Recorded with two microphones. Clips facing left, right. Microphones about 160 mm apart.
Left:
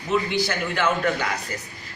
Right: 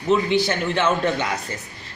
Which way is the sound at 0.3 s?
25° right (ahead or behind).